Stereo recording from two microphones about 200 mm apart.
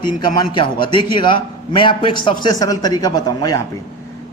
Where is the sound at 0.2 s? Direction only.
20° left (ahead or behind).